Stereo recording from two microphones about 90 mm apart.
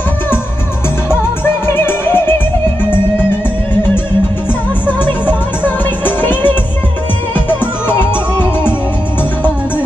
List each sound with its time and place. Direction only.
1.8 s music: 25° left (ahead or behind)
4.8 s music: 20° left (ahead or behind)